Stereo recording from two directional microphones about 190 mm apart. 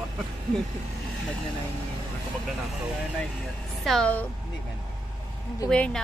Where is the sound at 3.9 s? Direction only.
5° left (ahead or behind).